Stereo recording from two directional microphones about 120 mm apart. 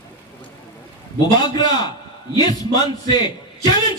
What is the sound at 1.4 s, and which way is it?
A man's voice, 35° left (ahead or behind).